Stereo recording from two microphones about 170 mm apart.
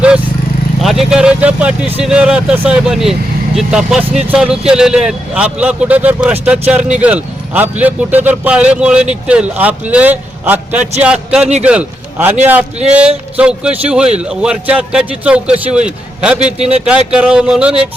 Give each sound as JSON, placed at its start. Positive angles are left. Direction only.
{"t": 0.8, "sound": "a man's voice", "side_deg": 0}
{"t": 16.6, "sound": "speech", "side_deg": -35}
{"t": 17.1, "sound": "a man's voice", "side_deg": -5}